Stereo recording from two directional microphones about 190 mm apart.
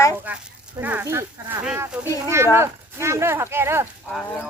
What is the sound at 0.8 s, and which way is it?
Speech, 10° right (ahead or behind).